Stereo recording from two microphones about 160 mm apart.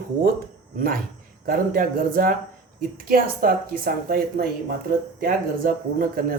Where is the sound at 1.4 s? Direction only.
65° right (ahead or behind).